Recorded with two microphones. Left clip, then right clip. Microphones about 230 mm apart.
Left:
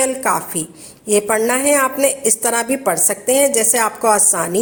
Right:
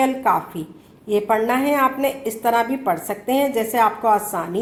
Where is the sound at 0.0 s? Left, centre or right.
Left.